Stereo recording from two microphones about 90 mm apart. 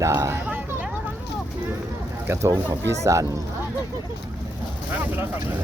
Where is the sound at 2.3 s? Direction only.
35° right (ahead or behind).